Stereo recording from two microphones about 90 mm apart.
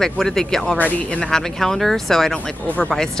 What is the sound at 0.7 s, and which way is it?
Speech, 15° left (ahead or behind).